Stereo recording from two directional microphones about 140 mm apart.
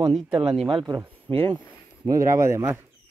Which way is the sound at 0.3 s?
35° right (ahead or behind).